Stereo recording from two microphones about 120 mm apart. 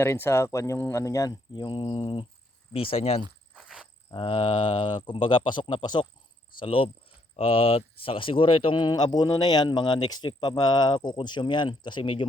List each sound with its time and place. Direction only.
0.0 s speech: 20° left (ahead or behind)
1.5 s speech: 40° left (ahead or behind)
3.5 s insect: 5° right (ahead or behind)
4.1 s speech: 45° left (ahead or behind)
6.6 s speech: 50° left (ahead or behind)